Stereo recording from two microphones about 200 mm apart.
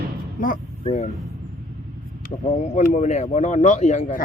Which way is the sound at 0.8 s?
35° left (ahead or behind).